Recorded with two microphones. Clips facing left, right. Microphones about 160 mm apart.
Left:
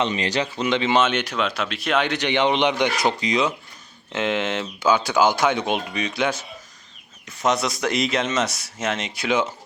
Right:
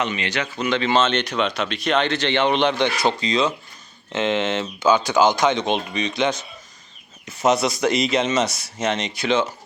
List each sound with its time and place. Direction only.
0.0 s speech: 35° left (ahead or behind); by 9.4 s 5° left (ahead or behind)